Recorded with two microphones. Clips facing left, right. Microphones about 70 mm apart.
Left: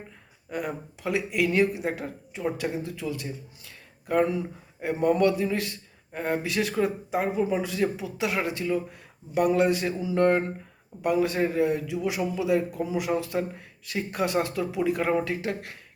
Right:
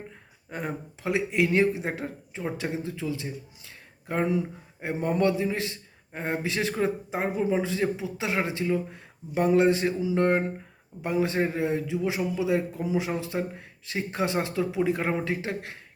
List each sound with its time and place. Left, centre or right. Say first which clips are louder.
0.5 s a man's voice: left 2 dB; right